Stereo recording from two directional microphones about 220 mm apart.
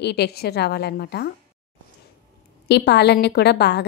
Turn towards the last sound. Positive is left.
turn(degrees=50)  # may be behind; listen again after turning